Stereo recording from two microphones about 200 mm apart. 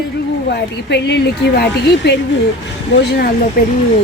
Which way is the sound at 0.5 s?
55° left (ahead or behind).